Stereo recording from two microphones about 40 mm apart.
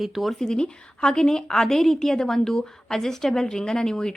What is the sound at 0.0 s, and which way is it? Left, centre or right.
Speech, centre.